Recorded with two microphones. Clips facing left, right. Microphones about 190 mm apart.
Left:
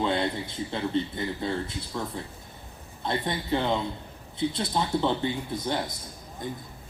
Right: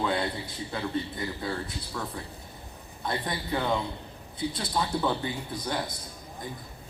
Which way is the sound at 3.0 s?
25° left (ahead or behind).